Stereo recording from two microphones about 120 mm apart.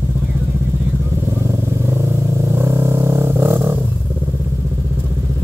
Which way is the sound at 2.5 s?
20° right (ahead or behind).